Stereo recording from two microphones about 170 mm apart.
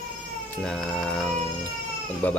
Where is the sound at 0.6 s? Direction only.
5° left (ahead or behind).